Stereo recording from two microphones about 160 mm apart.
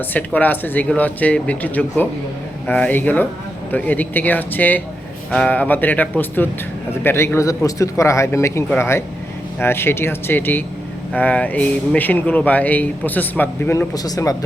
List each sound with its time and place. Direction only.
0.1 s speech: 10° left (ahead or behind)